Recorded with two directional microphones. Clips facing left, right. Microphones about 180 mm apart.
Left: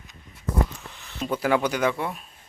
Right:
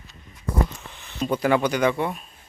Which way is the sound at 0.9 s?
5° left (ahead or behind).